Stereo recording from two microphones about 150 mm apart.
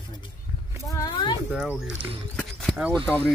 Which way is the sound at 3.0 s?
10° left (ahead or behind).